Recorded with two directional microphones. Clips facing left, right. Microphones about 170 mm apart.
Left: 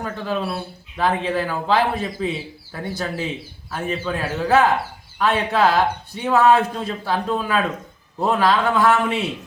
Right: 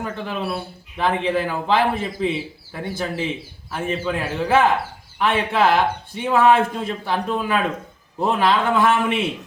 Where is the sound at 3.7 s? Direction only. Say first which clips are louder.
Right 1 dB; 15° right (ahead or behind).